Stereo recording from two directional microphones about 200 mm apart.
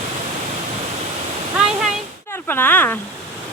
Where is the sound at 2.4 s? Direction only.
10° left (ahead or behind).